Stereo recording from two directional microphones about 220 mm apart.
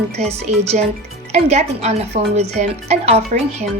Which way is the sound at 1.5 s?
30° right (ahead or behind).